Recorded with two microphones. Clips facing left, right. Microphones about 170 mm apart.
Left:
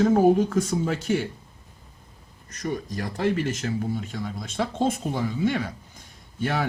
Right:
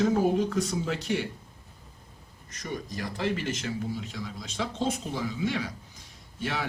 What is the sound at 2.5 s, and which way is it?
Speech, 45° left (ahead or behind).